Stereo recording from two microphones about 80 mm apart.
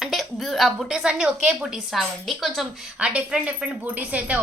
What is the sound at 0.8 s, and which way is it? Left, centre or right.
A woman's voice, centre.